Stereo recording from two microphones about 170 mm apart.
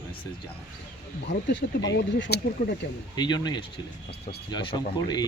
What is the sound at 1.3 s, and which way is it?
Speech, 90° left.